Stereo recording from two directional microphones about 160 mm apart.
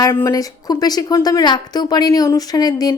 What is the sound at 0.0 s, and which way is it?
A woman's voice, 15° left (ahead or behind).